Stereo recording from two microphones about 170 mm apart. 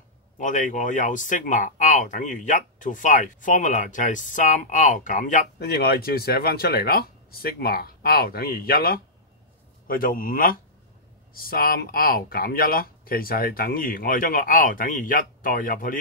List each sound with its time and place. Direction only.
0.4 s speech: 50° left (ahead or behind)